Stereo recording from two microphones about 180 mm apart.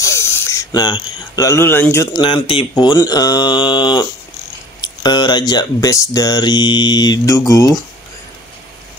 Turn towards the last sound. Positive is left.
turn(degrees=15)  # may be behind; listen again after turning